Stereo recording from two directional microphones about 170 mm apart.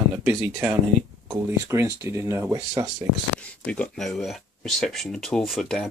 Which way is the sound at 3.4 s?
5° left (ahead or behind).